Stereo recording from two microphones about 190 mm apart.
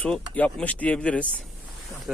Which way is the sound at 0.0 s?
5° left (ahead or behind).